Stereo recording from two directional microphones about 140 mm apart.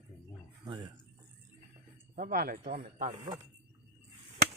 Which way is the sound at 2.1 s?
90° right.